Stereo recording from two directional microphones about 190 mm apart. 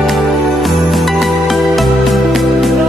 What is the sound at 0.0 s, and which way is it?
Music, centre (ahead or behind).